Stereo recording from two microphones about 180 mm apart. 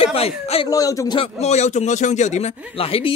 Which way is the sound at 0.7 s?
20° left (ahead or behind).